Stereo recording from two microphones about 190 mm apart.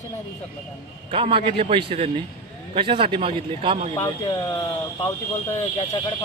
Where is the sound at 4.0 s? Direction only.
20° left (ahead or behind).